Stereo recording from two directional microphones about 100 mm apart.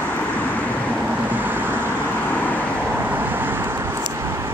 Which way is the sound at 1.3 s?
20° right (ahead or behind).